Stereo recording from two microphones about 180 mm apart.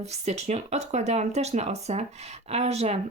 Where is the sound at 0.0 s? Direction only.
40° right (ahead or behind).